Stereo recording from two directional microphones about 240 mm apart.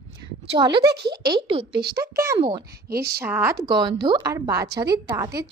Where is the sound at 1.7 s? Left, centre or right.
Right.